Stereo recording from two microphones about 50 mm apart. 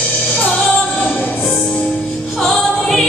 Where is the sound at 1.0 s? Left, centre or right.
Left.